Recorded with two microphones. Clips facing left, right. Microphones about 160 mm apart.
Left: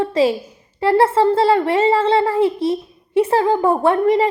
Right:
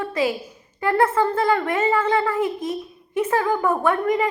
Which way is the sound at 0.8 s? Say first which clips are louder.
Left 5 dB; 30° left (ahead or behind).